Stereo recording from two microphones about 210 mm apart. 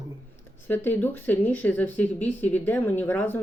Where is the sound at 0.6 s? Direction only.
10° left (ahead or behind).